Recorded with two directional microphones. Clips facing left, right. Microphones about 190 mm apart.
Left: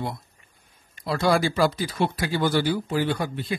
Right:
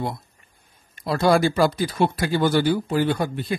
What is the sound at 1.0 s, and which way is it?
Speech, 45° right (ahead or behind).